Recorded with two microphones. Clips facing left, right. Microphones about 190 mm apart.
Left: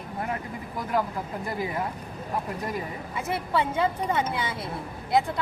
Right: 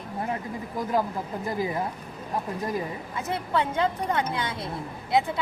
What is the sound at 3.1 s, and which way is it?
A woman's voice, 10° left (ahead or behind).